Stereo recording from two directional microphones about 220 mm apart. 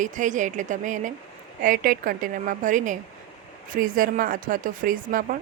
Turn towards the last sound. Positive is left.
turn(degrees=-40)  # may be behind; listen again after turning